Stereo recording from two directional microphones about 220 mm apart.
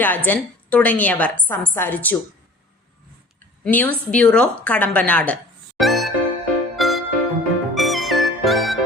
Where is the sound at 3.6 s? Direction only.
10° left (ahead or behind).